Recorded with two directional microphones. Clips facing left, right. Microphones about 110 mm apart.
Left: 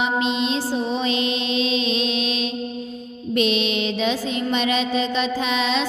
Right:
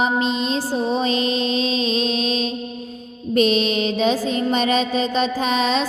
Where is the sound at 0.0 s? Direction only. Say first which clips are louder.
Right 2 dB; 40° right (ahead or behind).